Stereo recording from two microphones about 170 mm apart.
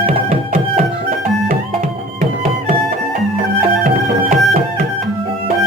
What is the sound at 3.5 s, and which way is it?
Music, 50° right (ahead or behind).